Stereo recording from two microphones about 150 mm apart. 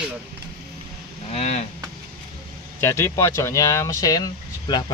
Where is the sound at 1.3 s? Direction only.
50° left (ahead or behind).